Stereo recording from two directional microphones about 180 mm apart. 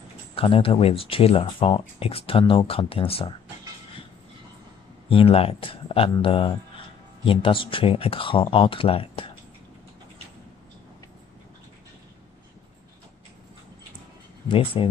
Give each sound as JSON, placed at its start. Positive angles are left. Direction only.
{"t": 0.4, "sound": "speech", "side_deg": 30}
{"t": 5.1, "sound": "speech", "side_deg": 30}
{"t": 14.5, "sound": "speech", "side_deg": 30}